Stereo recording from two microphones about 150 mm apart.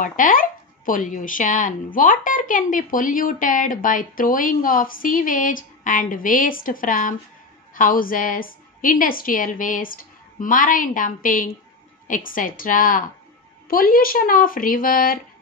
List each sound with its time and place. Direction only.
0.0 s a woman's voice: 65° left (ahead or behind)